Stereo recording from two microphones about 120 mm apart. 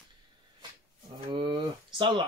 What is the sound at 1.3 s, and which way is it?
Speech, 40° right (ahead or behind).